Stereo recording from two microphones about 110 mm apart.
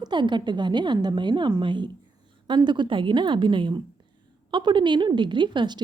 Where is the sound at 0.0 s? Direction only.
45° right (ahead or behind).